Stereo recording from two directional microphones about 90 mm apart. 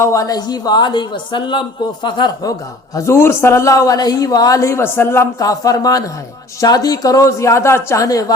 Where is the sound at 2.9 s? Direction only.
30° left (ahead or behind).